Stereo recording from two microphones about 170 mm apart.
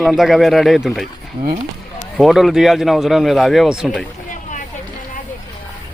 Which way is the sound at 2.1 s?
Centre (ahead or behind).